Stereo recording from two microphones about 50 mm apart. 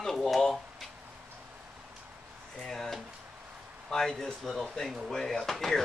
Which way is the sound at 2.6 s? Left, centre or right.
Centre.